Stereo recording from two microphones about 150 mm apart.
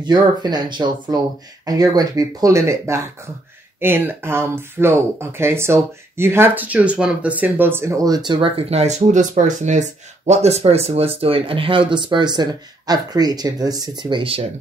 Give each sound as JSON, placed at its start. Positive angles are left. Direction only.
{"t": 0.0, "sound": "speech", "side_deg": -30}